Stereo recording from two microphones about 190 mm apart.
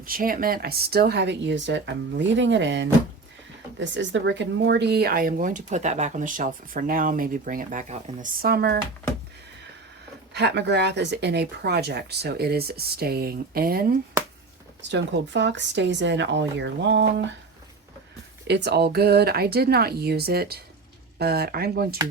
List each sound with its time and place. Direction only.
0.0 s speech: 50° right (ahead or behind)
10.3 s speech: 65° right (ahead or behind)
14.8 s speech: 70° right (ahead or behind)
18.4 s speech: 60° right (ahead or behind)